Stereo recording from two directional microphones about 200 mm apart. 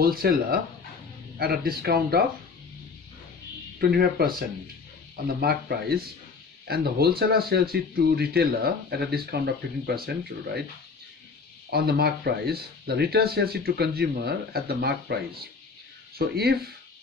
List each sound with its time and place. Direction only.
0.0 s speech: 50° right (ahead or behind)
3.8 s speech: 50° right (ahead or behind)
11.7 s speech: 55° right (ahead or behind)